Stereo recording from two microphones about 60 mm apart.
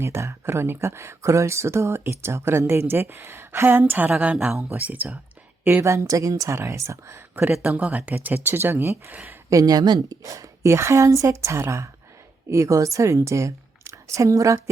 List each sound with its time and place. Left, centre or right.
0.0 s speech: right
5.8 s a woman's voice: right
7.2 s speech: right
7.6 s speech: right
9.5 s a woman's voice: right